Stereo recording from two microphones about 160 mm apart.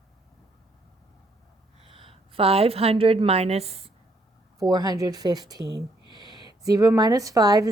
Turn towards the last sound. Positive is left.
turn(degrees=-25)  # may be behind; listen again after turning